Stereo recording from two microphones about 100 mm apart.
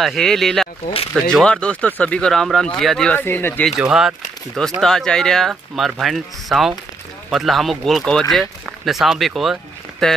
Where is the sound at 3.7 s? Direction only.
5° right (ahead or behind).